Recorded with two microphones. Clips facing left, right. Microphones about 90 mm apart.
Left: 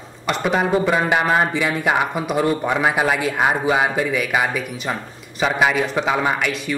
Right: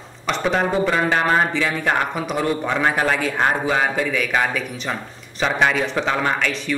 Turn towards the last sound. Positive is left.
turn(degrees=10)  # may be behind; listen again after turning